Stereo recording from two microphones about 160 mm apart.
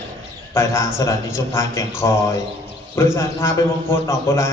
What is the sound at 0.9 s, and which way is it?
A man's voice, 15° left (ahead or behind).